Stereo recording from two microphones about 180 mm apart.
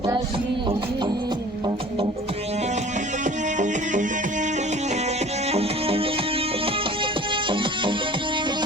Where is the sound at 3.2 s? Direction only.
45° right (ahead or behind).